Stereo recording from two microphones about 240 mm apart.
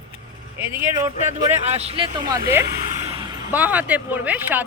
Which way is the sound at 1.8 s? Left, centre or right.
Right.